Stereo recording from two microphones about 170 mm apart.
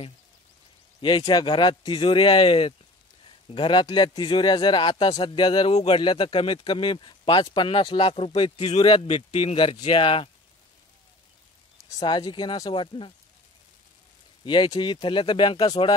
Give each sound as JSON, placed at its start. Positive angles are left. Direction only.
{"t": 1.0, "sound": "speech", "side_deg": 25}
{"t": 12.0, "sound": "speech", "side_deg": 25}
{"t": 14.4, "sound": "speech", "side_deg": 30}